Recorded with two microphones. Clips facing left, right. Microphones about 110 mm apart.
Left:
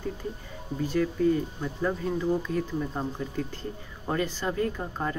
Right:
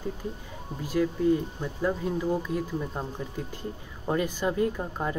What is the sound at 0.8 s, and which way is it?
Speech, 10° right (ahead or behind).